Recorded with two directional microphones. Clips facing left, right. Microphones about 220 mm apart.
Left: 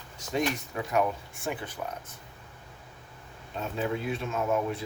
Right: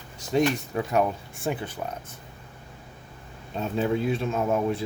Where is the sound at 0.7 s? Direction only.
30° right (ahead or behind).